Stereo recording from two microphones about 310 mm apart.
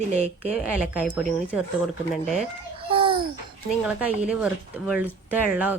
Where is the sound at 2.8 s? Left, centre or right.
Centre.